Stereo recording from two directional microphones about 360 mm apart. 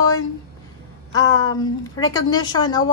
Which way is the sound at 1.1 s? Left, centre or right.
Centre.